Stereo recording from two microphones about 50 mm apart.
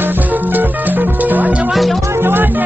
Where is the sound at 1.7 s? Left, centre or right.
Centre.